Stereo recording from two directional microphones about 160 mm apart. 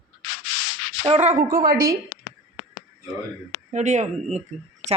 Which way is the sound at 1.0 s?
40° right (ahead or behind).